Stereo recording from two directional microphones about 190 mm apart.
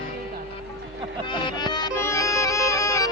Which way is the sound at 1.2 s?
25° left (ahead or behind).